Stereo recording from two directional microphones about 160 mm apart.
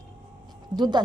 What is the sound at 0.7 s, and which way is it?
Speech, 30° right (ahead or behind).